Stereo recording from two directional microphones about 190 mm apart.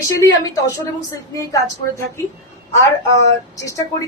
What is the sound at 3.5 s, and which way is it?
Speech, 15° left (ahead or behind).